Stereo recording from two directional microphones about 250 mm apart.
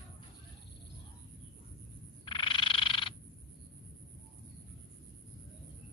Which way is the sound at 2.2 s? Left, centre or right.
Centre.